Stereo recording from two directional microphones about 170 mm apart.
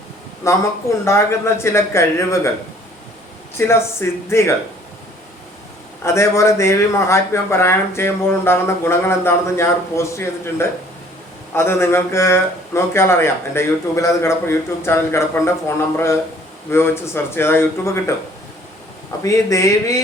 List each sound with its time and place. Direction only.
0.4 s speech: 15° left (ahead or behind)
3.6 s speech: 15° left (ahead or behind)
6.0 s speech: 15° left (ahead or behind)
16.6 s speech: 15° left (ahead or behind)
19.2 s speech: 20° left (ahead or behind)